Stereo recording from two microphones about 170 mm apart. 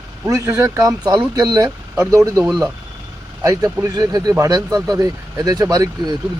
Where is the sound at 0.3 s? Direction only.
20° right (ahead or behind).